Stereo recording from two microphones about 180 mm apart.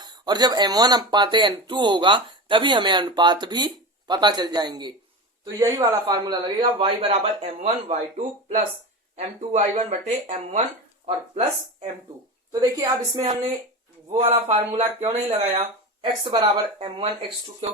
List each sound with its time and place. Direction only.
0.0 s speech: 25° right (ahead or behind); by 10.3 s 40° right (ahead or behind)
12.5 s speech: 20° right (ahead or behind)
14.2 s speech: 30° right (ahead or behind)